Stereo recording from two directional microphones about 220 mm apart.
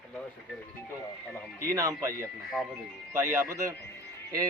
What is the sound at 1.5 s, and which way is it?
Speech, 15° right (ahead or behind).